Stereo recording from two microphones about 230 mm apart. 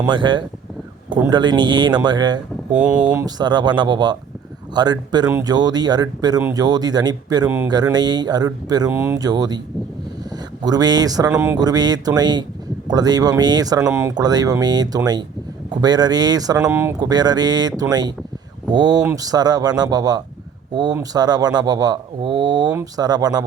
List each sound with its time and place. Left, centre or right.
0.1 s speech: centre
2.7 s speech: centre